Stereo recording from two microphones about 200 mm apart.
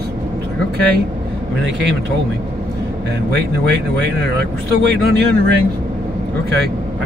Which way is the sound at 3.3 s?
55° right (ahead or behind).